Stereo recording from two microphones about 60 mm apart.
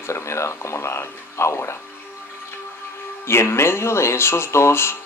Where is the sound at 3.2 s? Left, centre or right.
Left.